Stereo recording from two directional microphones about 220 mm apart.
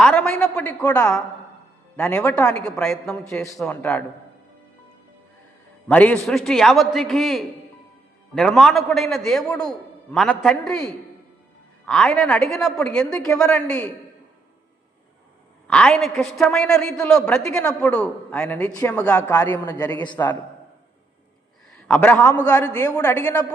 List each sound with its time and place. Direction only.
0.0 s a man's voice: 5° left (ahead or behind)
5.9 s a man's voice: 5° left (ahead or behind)
15.6 s a man's voice: 5° left (ahead or behind)
21.7 s a man's voice: 5° left (ahead or behind)